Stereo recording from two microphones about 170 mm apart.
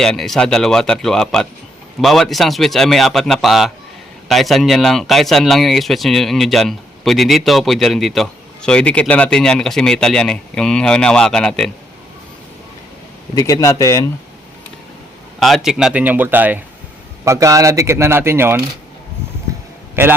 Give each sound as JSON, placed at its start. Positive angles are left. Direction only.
{"t": 0.0, "sound": "speech", "side_deg": 0}
{"t": 13.3, "sound": "a man's voice", "side_deg": 20}
{"t": 15.4, "sound": "speech", "side_deg": 0}
{"t": 20.0, "sound": "speech", "side_deg": -10}